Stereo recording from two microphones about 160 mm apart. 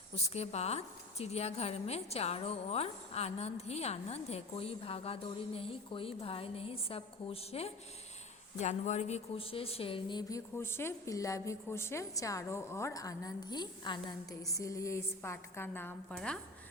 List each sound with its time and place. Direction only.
0.3 s a woman's voice: 40° left (ahead or behind); by 16.4 s 5° left (ahead or behind)